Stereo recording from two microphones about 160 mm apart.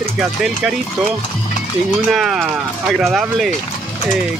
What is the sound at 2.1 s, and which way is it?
Speech, centre (ahead or behind).